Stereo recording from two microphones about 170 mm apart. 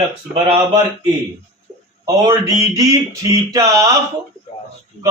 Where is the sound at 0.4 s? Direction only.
30° right (ahead or behind).